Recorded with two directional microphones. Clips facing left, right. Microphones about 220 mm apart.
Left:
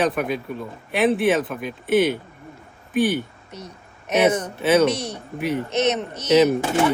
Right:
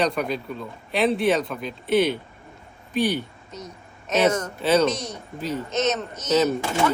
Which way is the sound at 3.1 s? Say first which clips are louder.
Left 2 dB; 65° left (ahead or behind).